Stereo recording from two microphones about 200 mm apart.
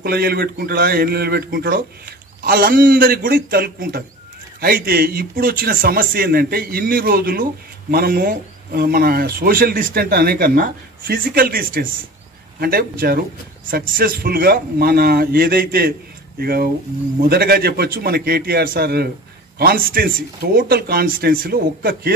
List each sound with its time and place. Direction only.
0.0 s speech: 50° right (ahead or behind)